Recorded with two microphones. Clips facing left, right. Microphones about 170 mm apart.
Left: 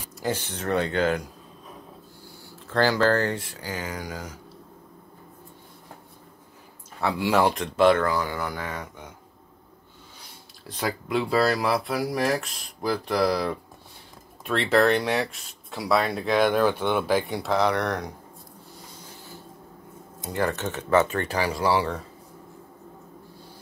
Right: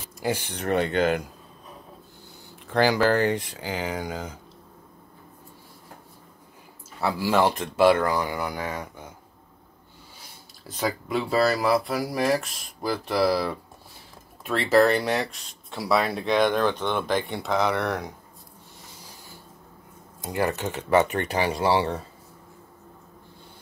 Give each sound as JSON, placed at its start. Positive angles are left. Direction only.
{"t": 0.2, "sound": "speech", "side_deg": -10}
{"t": 2.7, "sound": "speech", "side_deg": -15}
{"t": 7.0, "sound": "speech", "side_deg": 0}
{"t": 10.7, "sound": "speech", "side_deg": 0}
{"t": 20.2, "sound": "speech", "side_deg": -15}